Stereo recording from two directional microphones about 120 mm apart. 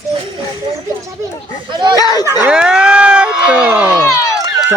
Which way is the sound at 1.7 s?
40° right (ahead or behind).